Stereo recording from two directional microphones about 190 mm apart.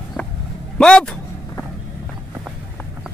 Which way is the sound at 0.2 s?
5° left (ahead or behind).